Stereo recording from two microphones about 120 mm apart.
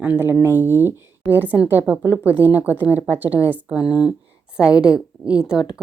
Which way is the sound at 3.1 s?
15° right (ahead or behind).